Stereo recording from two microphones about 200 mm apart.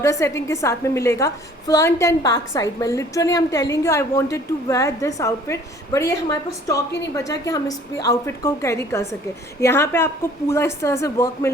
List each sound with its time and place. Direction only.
0.0 s a woman's voice: 15° left (ahead or behind)